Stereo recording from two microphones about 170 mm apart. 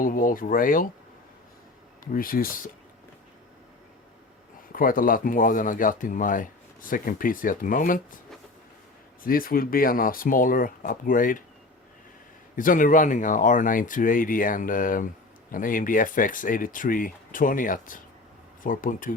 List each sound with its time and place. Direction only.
0.0 s speech: 55° left (ahead or behind)
2.1 s speech: 55° left (ahead or behind)
4.7 s speech: 55° left (ahead or behind)
9.2 s speech: 55° left (ahead or behind)
12.5 s speech: 50° left (ahead or behind)